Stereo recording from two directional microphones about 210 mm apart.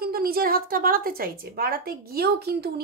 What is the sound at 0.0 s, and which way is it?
A woman's voice, 45° right (ahead or behind).